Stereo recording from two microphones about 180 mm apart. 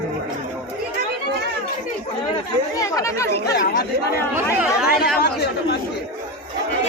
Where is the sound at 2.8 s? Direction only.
20° left (ahead or behind).